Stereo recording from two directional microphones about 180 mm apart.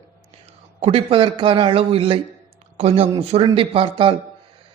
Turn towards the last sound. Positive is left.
turn(degrees=-30)  # may be behind; listen again after turning